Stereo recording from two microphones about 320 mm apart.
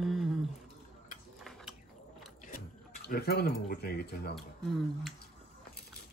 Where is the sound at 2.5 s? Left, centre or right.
Left.